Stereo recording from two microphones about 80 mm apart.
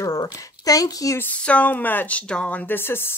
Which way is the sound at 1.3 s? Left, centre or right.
Centre.